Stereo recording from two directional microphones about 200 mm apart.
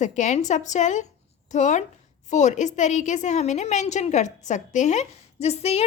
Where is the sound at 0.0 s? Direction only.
35° left (ahead or behind).